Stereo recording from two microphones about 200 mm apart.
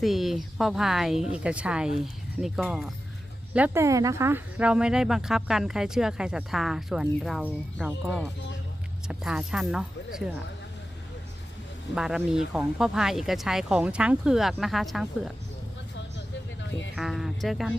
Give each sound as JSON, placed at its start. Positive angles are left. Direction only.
{"t": 0.0, "sound": "speech", "side_deg": 0}
{"t": 11.9, "sound": "speech", "side_deg": -5}
{"t": 16.6, "sound": "a sound", "side_deg": 65}
{"t": 16.9, "sound": "speech", "side_deg": 0}